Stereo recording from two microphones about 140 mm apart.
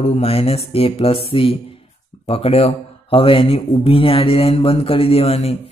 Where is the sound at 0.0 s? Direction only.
50° left (ahead or behind).